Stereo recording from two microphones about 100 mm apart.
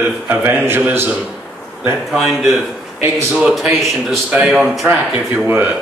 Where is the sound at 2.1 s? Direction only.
Centre (ahead or behind).